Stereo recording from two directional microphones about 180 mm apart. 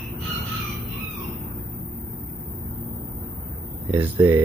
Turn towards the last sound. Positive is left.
turn(degrees=-10)  # may be behind; listen again after turning